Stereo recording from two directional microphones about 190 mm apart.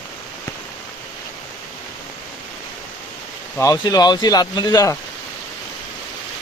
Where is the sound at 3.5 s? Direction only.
15° left (ahead or behind).